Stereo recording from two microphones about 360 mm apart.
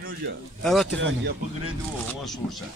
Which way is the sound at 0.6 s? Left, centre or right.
Centre.